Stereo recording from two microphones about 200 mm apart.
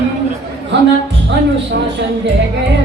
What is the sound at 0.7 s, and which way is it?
Speech, 60° right (ahead or behind).